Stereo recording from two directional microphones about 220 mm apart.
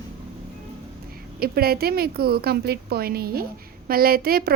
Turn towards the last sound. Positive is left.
turn(degrees=-45)  # may be behind; listen again after turning